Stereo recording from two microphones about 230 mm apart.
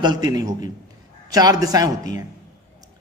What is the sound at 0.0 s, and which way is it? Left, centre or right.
A man's voice, centre.